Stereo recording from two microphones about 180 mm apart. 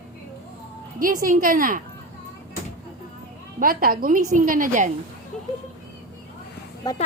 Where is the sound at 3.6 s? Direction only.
55° right (ahead or behind).